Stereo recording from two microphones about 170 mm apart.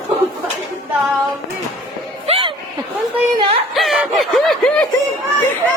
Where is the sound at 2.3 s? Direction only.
30° right (ahead or behind).